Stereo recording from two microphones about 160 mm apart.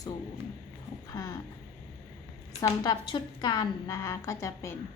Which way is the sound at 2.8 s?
30° left (ahead or behind).